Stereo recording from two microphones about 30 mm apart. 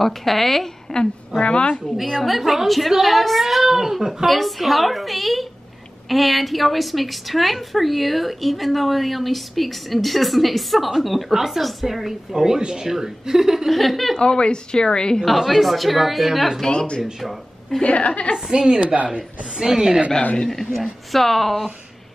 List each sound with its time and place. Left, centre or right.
0.0 s a woman's voice: centre
0.9 s a woman's voice: centre
1.4 s a woman's voice: left
2.2 s a woman's voice: centre
3.6 s a woman's voice: centre
4.3 s a woman's voice: centre
12.4 s a woman's voice: centre
13.7 s a woman's voice: centre
14.1 s a woman's voice: left
15.2 s a woman's voice: centre
17.8 s a woman's voice: left
18.5 s a woman's voice: right
20.4 s a woman's voice: centre